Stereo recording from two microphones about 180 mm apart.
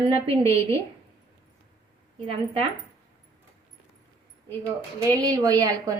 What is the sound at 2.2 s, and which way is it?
Speech, 30° right (ahead or behind).